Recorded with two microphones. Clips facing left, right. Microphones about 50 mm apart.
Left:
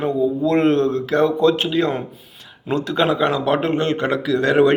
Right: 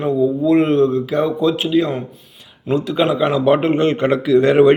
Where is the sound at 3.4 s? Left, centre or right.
Centre.